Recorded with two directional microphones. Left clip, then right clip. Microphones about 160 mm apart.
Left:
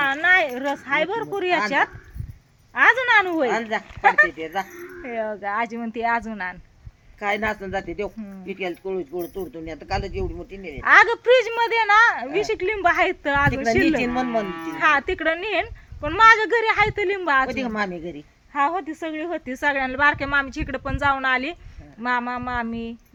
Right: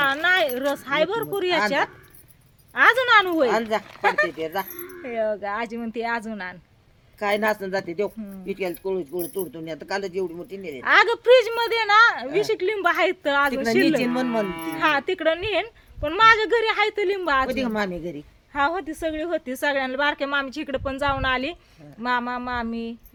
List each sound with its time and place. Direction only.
0.0 s speech: 10° right (ahead or behind)
2.7 s speech: 5° right (ahead or behind)
3.5 s speech: 30° right (ahead or behind)
4.0 s a woman's voice: centre (ahead or behind)
4.3 s speech: 30° right (ahead or behind)
4.7 s a woman's voice: centre (ahead or behind)
7.2 s speech: 35° right (ahead or behind)
10.8 s a woman's voice: 5° left (ahead or behind)
14.4 s speech: 90° right
14.8 s a woman's voice: 5° left (ahead or behind)
17.5 s speech: 35° right (ahead or behind)
18.5 s a woman's voice: centre (ahead or behind)